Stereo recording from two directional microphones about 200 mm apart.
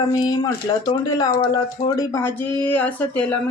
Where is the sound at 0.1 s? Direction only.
20° left (ahead or behind).